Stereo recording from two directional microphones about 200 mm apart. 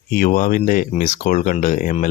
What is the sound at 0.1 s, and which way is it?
Speech, 45° left (ahead or behind).